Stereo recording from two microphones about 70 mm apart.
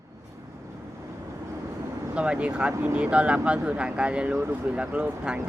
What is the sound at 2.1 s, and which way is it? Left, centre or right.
Speech, centre.